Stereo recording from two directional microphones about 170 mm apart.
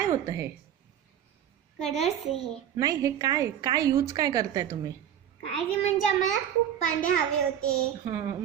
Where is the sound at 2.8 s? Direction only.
20° right (ahead or behind).